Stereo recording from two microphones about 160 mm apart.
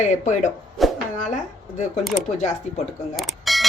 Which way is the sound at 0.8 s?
Centre (ahead or behind).